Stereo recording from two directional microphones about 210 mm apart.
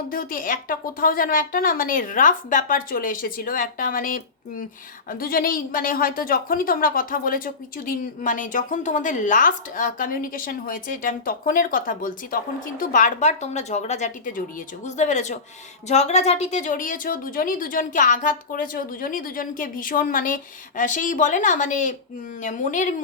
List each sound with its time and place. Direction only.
0.1 s a woman's voice: 45° left (ahead or behind)